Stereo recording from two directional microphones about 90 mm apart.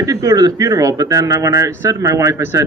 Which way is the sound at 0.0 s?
40° right (ahead or behind).